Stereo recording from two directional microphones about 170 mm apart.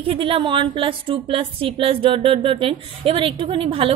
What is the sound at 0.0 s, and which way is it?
A woman's voice, 30° right (ahead or behind).